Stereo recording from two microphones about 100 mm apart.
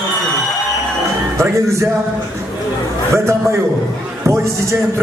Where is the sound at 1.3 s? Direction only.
30° right (ahead or behind).